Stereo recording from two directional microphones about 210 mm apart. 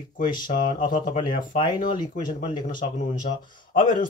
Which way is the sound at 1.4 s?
20° left (ahead or behind).